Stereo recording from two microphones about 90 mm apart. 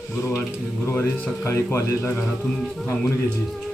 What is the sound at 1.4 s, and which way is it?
Speech, 30° left (ahead or behind).